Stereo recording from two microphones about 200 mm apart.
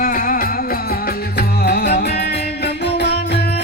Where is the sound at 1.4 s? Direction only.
55° left (ahead or behind).